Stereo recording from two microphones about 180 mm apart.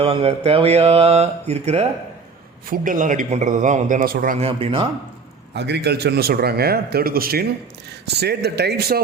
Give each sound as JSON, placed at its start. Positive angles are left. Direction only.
{"t": 0.0, "sound": "a man's voice", "side_deg": -35}
{"t": 4.4, "sound": "speech", "side_deg": -30}
{"t": 5.5, "sound": "speech", "side_deg": -70}